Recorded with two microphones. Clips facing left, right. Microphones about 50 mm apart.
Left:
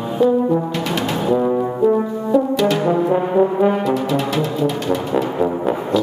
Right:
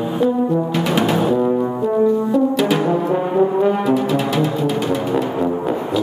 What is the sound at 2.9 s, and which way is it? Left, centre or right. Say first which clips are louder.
Brass instrument: left 1 dB; centre.